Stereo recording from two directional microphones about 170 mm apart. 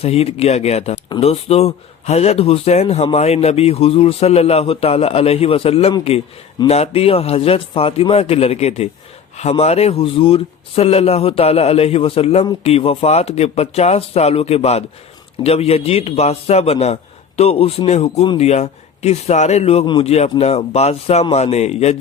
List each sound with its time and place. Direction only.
0.0 s speech: 35° left (ahead or behind)